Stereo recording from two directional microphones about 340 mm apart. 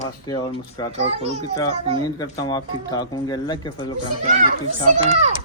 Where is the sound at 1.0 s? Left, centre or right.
Centre.